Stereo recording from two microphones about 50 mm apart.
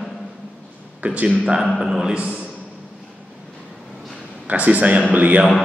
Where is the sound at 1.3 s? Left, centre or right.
Centre.